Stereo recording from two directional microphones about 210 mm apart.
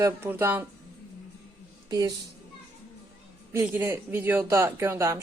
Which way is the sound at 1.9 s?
20° right (ahead or behind).